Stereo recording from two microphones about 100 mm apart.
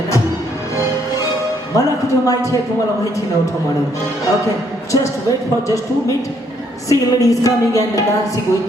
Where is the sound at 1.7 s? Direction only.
35° left (ahead or behind).